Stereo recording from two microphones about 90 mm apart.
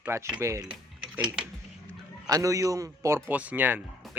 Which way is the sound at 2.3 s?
40° right (ahead or behind).